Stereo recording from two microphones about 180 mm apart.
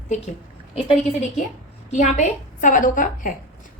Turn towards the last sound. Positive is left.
turn(degrees=45)  # may be behind; listen again after turning